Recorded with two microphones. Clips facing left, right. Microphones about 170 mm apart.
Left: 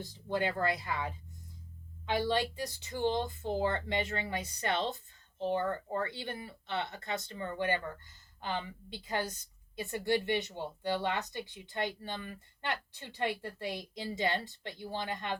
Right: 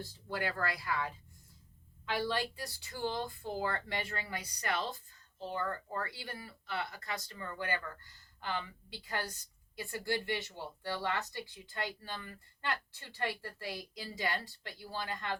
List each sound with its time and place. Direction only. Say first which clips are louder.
0.0 s speech: left 5 dB; 20° left (ahead or behind)